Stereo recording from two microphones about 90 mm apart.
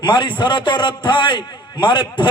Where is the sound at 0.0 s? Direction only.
60° left (ahead or behind).